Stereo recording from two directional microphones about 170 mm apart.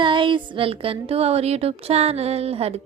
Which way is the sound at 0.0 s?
30° right (ahead or behind).